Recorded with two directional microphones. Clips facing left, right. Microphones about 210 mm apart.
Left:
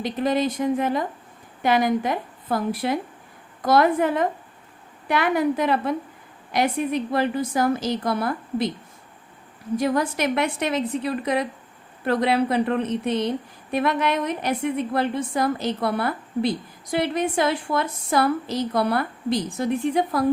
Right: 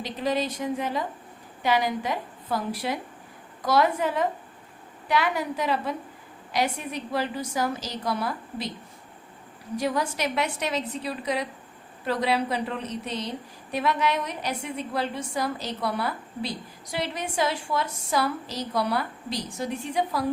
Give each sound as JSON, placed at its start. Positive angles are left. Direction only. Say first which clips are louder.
{"t": 0.0, "sound": "a woman's voice", "louder": "left 5 dB", "side_deg": 50}
{"t": 9.7, "sound": "a woman's voice", "louder": "left 5 dB", "side_deg": 55}